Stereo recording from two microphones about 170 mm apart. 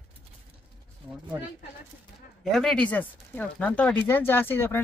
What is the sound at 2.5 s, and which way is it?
Speech, 5° left (ahead or behind).